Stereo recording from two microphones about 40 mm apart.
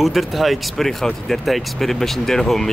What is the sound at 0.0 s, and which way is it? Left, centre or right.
Speech, centre.